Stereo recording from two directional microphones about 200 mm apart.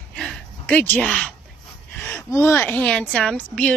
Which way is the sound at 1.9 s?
10° left (ahead or behind).